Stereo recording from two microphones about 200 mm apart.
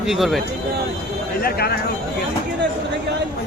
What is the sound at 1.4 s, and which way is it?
Speech, 50° left (ahead or behind).